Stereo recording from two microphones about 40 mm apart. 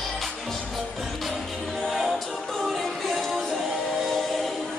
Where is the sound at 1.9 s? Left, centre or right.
Centre.